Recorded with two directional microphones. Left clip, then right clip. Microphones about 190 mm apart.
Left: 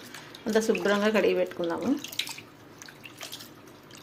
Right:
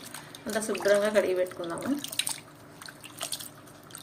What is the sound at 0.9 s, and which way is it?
Speech, 35° left (ahead or behind).